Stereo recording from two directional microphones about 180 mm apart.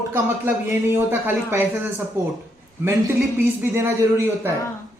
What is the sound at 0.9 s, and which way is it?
A man's voice, 10° right (ahead or behind).